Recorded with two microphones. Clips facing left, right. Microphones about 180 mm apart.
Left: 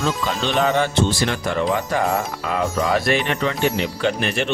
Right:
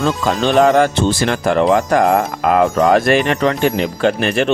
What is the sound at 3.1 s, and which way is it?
Speech, 80° right.